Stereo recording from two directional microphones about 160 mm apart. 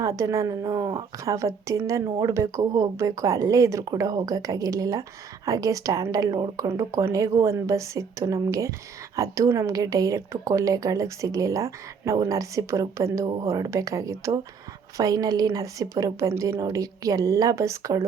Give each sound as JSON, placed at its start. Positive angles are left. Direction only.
{"t": 0.0, "sound": "a woman's voice", "side_deg": -20}